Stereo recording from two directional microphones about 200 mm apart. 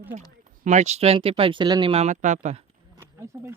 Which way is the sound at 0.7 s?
35° right (ahead or behind).